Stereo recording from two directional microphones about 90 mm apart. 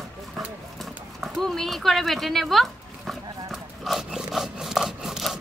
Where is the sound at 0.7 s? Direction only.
5° left (ahead or behind).